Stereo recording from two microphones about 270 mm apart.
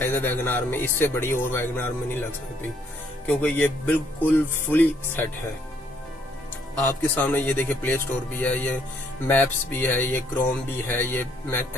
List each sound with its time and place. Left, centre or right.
0.0 s music: centre
3.3 s music: centre
7.0 s music: centre